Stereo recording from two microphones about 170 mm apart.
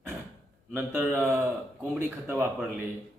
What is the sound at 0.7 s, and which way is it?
Speech, 15° right (ahead or behind).